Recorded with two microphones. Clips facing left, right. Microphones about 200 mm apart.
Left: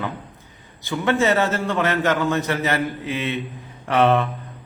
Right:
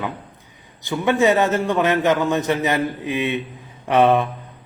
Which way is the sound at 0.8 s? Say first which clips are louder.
Right 3 dB; 15° right (ahead or behind).